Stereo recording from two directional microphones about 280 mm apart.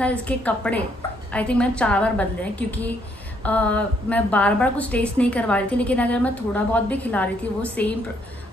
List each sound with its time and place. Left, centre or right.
0.0 s a woman's voice: centre